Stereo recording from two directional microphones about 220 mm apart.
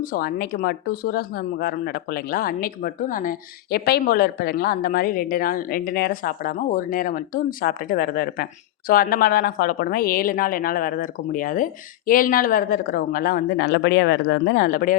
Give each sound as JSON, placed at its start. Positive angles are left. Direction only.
{"t": 0.0, "sound": "speech", "side_deg": 40}